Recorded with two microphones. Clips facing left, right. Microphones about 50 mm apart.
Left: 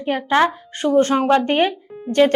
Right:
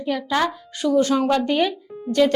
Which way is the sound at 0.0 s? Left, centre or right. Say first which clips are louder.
Left 5 dB; left.